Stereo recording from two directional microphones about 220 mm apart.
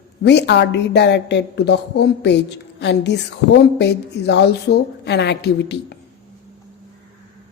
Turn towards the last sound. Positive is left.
turn(degrees=50)  # may be behind; listen again after turning